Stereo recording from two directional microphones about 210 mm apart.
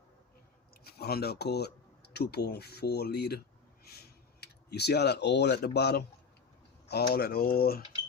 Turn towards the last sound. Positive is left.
turn(degrees=45)  # may be behind; listen again after turning